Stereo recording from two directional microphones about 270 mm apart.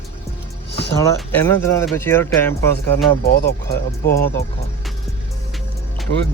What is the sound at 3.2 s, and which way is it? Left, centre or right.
Speech, left.